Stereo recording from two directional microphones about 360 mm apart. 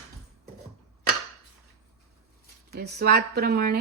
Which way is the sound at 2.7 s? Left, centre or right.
Right.